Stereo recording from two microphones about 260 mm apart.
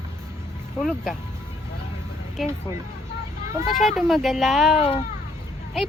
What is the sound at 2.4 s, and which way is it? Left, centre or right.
Speech, centre.